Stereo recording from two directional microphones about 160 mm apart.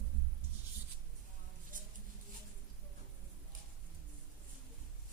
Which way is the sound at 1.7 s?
55° right (ahead or behind).